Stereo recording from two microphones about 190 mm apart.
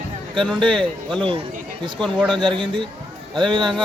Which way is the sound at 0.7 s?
5° left (ahead or behind).